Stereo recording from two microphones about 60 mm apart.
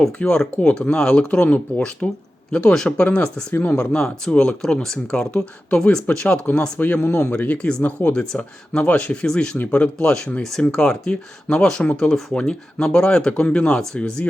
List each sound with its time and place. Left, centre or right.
0.2 s speech: centre
2.7 s speech: centre
3.5 s speech: left
3.8 s speech: centre
9.6 s speech: left